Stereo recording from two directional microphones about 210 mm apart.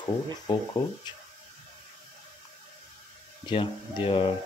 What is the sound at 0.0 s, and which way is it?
Speech, 20° left (ahead or behind).